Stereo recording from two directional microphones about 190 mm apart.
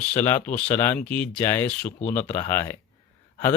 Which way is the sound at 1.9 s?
40° left (ahead or behind).